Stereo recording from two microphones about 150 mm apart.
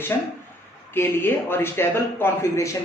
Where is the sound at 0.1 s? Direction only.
20° left (ahead or behind).